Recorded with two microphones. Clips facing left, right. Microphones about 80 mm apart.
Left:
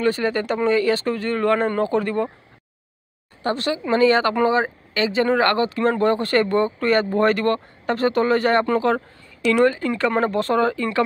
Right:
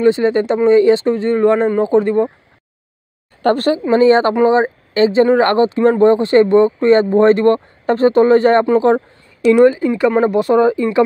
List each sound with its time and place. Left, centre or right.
0.0 s speech: right
3.4 s speech: right
3.9 s speech: right